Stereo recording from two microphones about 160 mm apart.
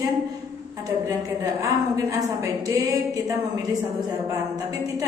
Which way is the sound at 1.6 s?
20° right (ahead or behind).